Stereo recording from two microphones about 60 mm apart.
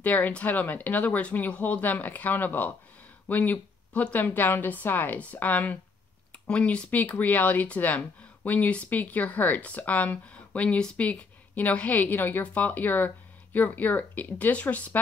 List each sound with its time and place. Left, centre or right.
0.0 s speech: left